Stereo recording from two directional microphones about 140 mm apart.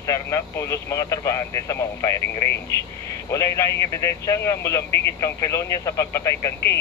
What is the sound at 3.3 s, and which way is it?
Speech, 20° left (ahead or behind).